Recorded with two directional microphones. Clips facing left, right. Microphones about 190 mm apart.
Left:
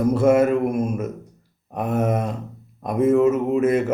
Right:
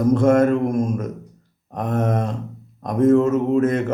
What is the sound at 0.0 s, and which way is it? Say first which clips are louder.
Speech: right 1 dB; 10° left (ahead or behind).